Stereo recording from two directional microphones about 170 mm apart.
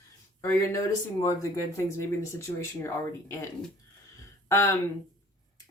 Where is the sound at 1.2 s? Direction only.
15° left (ahead or behind).